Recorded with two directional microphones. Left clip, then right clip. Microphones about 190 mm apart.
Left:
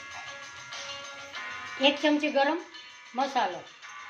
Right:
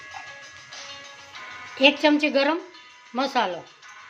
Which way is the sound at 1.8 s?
65° right (ahead or behind).